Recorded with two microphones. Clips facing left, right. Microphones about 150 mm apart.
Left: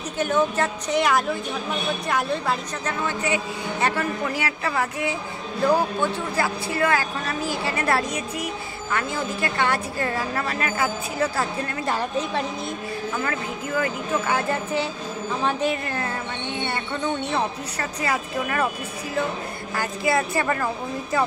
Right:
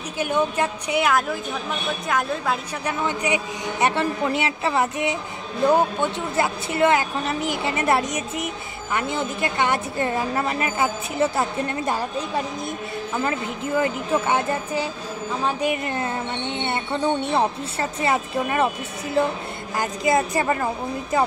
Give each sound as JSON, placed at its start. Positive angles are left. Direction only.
{"t": 0.2, "sound": "a woman's voice", "side_deg": -10}
{"t": 2.9, "sound": "speech", "side_deg": -15}
{"t": 13.2, "sound": "speech", "side_deg": -25}
{"t": 19.8, "sound": "speech", "side_deg": -20}